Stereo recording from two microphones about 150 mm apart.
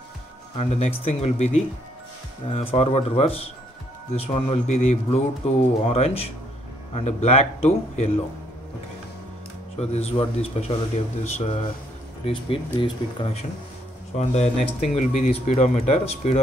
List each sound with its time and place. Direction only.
0.6 s speech: 45° left (ahead or behind)
9.8 s speech: 45° left (ahead or behind)